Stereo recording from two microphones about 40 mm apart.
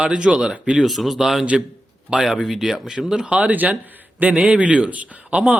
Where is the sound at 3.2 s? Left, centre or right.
Right.